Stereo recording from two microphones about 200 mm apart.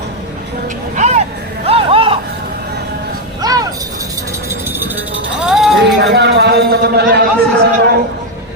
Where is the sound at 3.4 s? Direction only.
20° right (ahead or behind).